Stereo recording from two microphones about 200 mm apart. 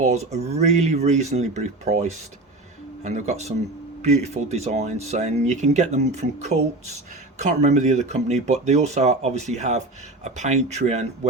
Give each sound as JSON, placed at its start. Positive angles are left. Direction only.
{"t": 0.0, "sound": "speech", "side_deg": -35}